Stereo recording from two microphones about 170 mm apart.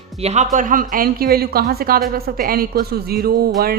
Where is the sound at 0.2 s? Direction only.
40° right (ahead or behind).